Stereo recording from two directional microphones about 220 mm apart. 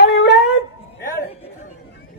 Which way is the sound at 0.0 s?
50° left (ahead or behind).